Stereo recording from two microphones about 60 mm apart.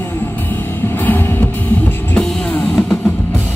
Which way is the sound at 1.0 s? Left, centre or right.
Left.